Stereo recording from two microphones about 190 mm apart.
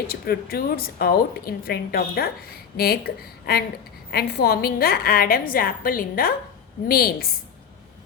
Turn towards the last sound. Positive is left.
turn(degrees=50)  # may be behind; listen again after turning